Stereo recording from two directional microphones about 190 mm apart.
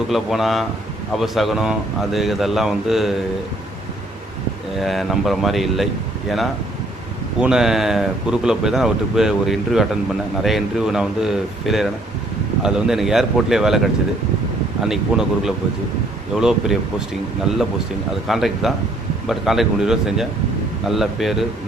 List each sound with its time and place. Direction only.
0.1 s speech: centre (ahead or behind)
4.8 s speech: centre (ahead or behind)
7.3 s speech: 5° right (ahead or behind)
14.8 s speech: centre (ahead or behind)